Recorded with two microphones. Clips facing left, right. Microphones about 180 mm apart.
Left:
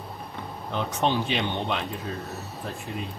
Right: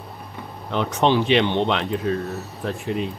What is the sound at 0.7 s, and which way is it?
Speech, 80° right.